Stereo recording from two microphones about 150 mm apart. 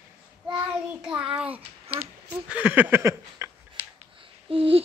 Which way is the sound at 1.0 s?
10° right (ahead or behind).